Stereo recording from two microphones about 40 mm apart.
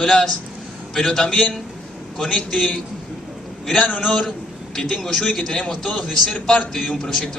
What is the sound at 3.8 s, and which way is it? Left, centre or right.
A man's voice, centre.